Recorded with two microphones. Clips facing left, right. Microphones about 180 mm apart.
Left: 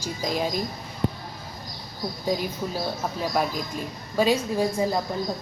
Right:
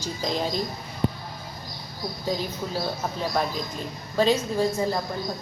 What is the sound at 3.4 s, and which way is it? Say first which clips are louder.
Speech: left 2 dB; 10° left (ahead or behind).